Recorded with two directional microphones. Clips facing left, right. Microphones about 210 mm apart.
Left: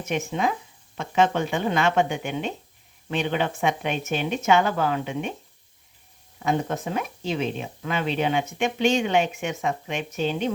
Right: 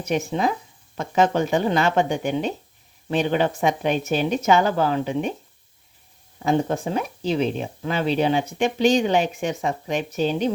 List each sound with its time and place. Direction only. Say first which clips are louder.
0.0 s speech: right 3 dB; 35° right (ahead or behind)
6.4 s speech: right 4 dB; 35° right (ahead or behind)